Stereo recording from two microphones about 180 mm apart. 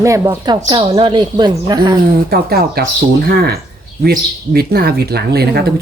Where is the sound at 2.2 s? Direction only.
60° right (ahead or behind).